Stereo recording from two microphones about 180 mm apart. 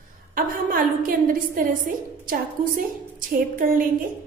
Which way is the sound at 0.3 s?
50° right (ahead or behind).